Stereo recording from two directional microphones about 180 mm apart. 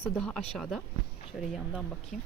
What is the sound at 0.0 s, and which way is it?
Speech, 5° left (ahead or behind).